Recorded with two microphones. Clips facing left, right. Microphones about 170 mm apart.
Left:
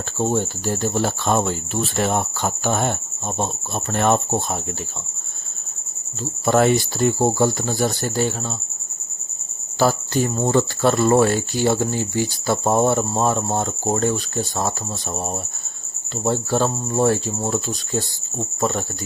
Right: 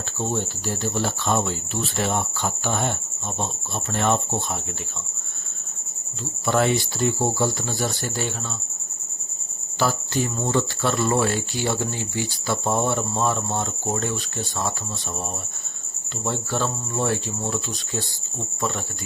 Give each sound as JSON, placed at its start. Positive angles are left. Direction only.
{"t": 0.2, "sound": "speech", "side_deg": 45}
{"t": 6.4, "sound": "speech", "side_deg": 45}
{"t": 9.7, "sound": "speech", "side_deg": 40}
{"t": 16.2, "sound": "cricket", "side_deg": 40}
{"t": 18.6, "sound": "speech", "side_deg": 45}